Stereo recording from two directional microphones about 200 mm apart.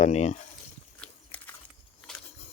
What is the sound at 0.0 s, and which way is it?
Speech, 35° left (ahead or behind).